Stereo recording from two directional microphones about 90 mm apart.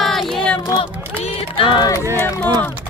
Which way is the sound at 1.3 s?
80° left.